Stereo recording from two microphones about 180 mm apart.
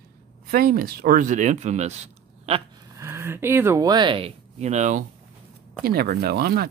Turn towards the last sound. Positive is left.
turn(degrees=-60)  # may be behind; listen again after turning